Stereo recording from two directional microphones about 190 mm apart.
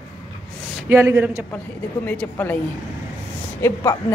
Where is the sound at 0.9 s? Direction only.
15° right (ahead or behind).